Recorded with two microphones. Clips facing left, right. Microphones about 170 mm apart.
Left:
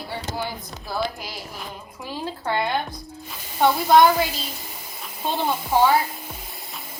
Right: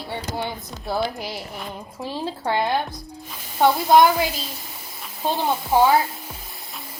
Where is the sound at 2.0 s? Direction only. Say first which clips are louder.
Right 2 dB; 30° right (ahead or behind).